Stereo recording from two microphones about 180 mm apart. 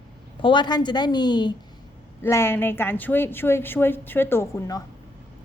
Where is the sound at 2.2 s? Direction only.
15° left (ahead or behind).